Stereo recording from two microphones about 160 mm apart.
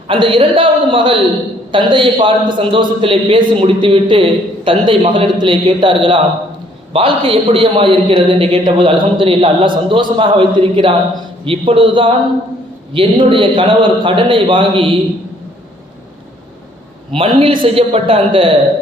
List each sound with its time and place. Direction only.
0.1 s a man's voice: 30° right (ahead or behind)
17.2 s a man's voice: 35° right (ahead or behind)